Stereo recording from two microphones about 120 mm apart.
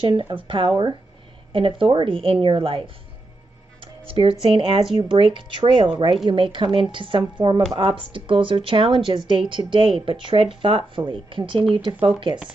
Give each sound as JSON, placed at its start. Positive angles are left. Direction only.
{"t": 0.0, "sound": "speech", "side_deg": -45}
{"t": 3.8, "sound": "speech", "side_deg": -45}